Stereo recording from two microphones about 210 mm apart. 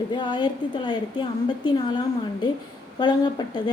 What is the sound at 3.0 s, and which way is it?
Speech, 20° left (ahead or behind).